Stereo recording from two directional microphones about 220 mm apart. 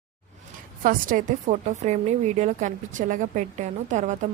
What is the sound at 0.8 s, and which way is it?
A woman's voice, 40° right (ahead or behind).